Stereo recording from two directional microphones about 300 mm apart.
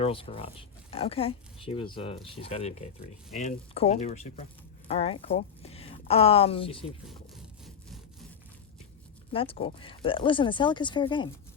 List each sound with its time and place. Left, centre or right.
0.0 s speech: centre
9.3 s speech: centre